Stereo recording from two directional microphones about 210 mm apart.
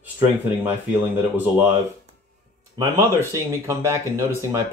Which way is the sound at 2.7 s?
10° right (ahead or behind).